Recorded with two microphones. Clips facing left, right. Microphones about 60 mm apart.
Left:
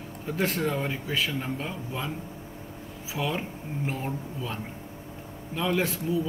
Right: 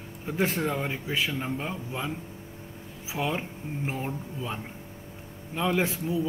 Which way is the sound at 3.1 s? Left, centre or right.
Centre.